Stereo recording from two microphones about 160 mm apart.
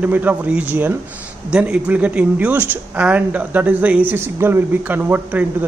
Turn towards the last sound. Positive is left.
turn(degrees=-10)  # may be behind; listen again after turning